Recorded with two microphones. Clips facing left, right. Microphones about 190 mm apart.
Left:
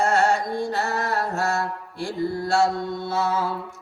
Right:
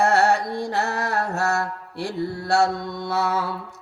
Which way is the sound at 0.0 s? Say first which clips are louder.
Right 2 dB; 65° right (ahead or behind).